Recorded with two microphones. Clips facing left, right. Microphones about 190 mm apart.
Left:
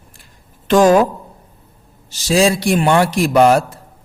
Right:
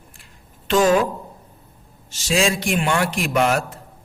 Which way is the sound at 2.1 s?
35° left (ahead or behind).